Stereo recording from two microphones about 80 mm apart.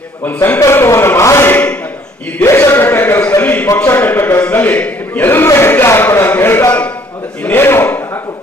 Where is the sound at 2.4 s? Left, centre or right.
Left.